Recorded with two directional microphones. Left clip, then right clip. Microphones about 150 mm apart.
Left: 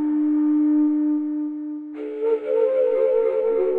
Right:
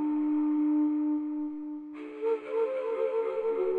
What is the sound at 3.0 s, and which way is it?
Music, 45° left (ahead or behind).